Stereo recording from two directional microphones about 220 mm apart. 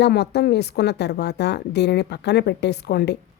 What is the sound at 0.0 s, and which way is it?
Speech, 50° left (ahead or behind).